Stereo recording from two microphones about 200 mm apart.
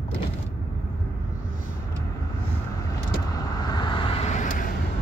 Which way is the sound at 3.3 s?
20° left (ahead or behind).